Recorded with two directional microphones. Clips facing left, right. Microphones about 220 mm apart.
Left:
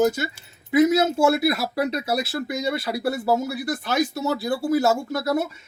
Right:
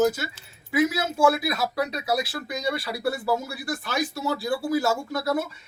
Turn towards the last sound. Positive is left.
turn(degrees=20)  # may be behind; listen again after turning